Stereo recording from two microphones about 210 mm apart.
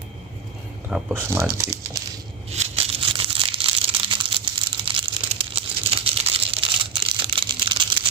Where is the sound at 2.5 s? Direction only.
30° right (ahead or behind).